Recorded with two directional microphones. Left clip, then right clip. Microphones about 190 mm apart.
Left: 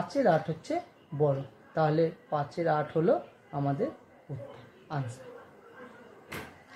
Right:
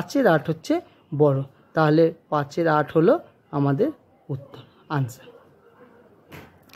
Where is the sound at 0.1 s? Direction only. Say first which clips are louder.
Right 7 dB; 40° right (ahead or behind).